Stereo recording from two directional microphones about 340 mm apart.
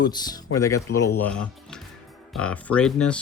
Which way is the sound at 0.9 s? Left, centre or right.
Left.